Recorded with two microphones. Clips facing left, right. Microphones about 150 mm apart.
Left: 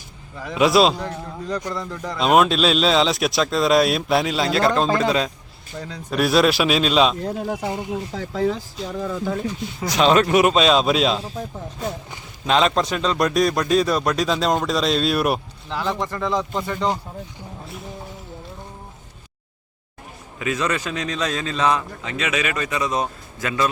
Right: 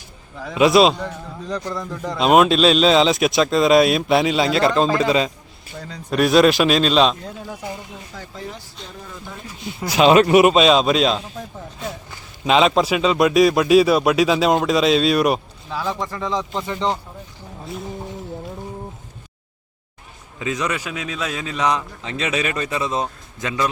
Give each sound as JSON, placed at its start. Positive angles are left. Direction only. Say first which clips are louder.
{"t": 0.3, "sound": "speech", "louder": "right 2 dB", "side_deg": 0}
{"t": 7.3, "sound": "speech", "louder": "left 7 dB", "side_deg": 50}
{"t": 8.1, "sound": "speech", "louder": "left 11 dB", "side_deg": 85}
{"t": 9.8, "sound": "speech", "louder": "right 3 dB", "side_deg": -5}
{"t": 12.5, "sound": "speech", "louder": "right 3 dB", "side_deg": -5}
{"t": 15.7, "sound": "a man's voice", "louder": "even", "side_deg": -10}
{"t": 16.3, "sound": "speech", "louder": "even", "side_deg": 5}
{"t": 20.4, "sound": "a man's voice", "louder": "even", "side_deg": -20}
{"t": 20.7, "sound": "a man's voice", "louder": "left 1 dB", "side_deg": -10}
{"t": 22.0, "sound": "a man's voice", "louder": "right 1 dB", "side_deg": -30}